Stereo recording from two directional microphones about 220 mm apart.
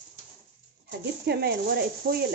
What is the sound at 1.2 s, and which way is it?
A woman's voice, 45° right (ahead or behind).